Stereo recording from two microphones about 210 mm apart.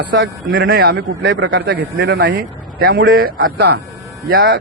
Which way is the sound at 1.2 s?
65° right (ahead or behind).